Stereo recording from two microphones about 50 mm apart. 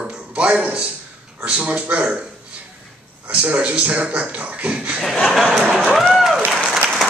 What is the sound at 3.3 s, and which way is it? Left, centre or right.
Speech, right.